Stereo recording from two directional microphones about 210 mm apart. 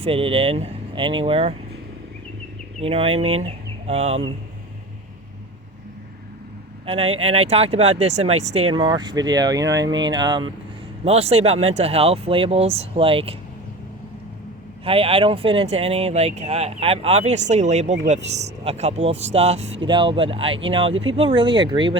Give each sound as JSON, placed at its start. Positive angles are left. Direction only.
{"t": 0.0, "sound": "speech", "side_deg": -25}
{"t": 2.8, "sound": "speech", "side_deg": -25}
{"t": 6.8, "sound": "speech", "side_deg": -25}
{"t": 14.8, "sound": "speech", "side_deg": -25}